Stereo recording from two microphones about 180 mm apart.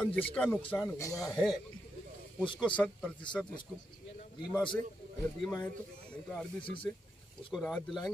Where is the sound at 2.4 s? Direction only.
25° left (ahead or behind).